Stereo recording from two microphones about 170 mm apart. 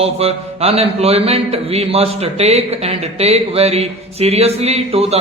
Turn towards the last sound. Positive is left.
turn(degrees=-35)  # may be behind; listen again after turning